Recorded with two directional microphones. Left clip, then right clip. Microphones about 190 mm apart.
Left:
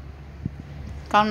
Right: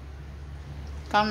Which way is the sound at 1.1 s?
25° left (ahead or behind).